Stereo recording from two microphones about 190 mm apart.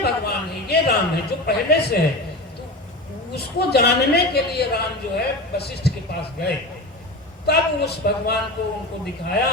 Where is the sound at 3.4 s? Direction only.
55° left (ahead or behind).